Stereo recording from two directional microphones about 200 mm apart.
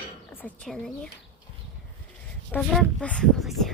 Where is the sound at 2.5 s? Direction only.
5° left (ahead or behind).